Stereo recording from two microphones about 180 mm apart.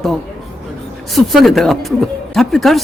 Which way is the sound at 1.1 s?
Centre (ahead or behind).